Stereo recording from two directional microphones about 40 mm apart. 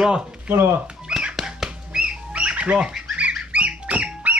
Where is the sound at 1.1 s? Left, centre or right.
Right.